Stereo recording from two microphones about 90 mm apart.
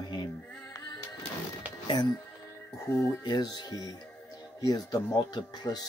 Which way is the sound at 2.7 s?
35° left (ahead or behind).